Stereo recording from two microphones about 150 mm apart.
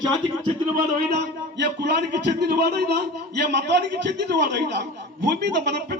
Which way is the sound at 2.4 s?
90° right.